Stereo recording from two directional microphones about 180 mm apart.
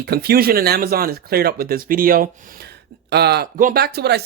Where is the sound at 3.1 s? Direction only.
65° right (ahead or behind).